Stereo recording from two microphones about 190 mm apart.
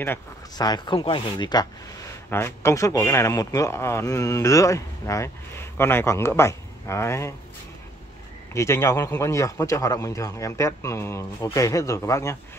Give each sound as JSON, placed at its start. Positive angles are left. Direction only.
{"t": 0.0, "sound": "speech", "side_deg": 15}
{"t": 8.5, "sound": "speech", "side_deg": 15}